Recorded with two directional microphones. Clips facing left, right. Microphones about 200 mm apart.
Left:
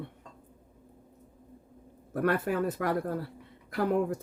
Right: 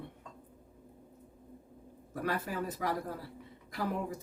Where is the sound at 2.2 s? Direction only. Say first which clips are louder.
Left 7 dB; 60° left (ahead or behind).